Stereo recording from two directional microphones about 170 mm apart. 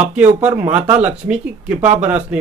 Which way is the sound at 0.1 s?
10° right (ahead or behind).